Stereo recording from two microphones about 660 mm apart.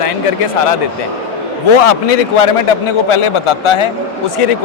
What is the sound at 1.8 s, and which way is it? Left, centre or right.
Speech, left.